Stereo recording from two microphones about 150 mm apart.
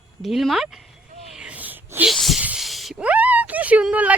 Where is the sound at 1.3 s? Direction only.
5° right (ahead or behind).